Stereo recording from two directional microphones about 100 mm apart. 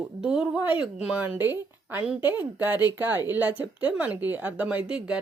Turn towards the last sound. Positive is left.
turn(degrees=-10)  # may be behind; listen again after turning